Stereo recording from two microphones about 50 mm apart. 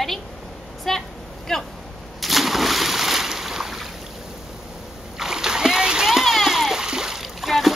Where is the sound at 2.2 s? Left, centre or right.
Centre.